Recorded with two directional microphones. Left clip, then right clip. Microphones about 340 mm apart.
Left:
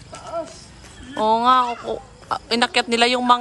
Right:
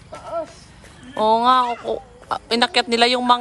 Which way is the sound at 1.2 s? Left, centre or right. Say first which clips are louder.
Right 1 dB; centre.